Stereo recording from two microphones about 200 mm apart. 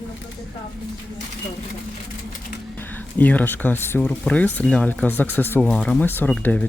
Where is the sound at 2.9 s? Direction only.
10° left (ahead or behind).